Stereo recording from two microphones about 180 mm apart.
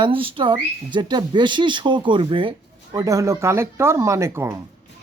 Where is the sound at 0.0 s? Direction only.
30° right (ahead or behind).